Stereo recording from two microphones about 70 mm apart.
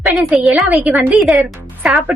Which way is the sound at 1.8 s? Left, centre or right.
Centre.